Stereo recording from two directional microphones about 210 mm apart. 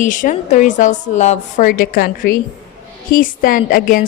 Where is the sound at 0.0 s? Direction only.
35° left (ahead or behind).